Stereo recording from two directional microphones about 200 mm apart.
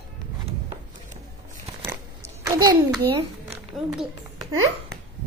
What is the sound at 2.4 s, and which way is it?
Speech, 20° right (ahead or behind).